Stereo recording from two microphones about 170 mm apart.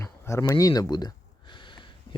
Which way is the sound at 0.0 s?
15° left (ahead or behind).